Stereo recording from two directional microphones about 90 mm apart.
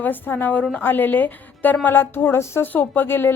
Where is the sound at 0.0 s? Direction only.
20° left (ahead or behind).